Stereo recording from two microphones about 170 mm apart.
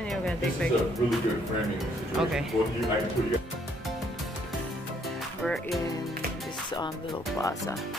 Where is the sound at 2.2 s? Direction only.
5° right (ahead or behind).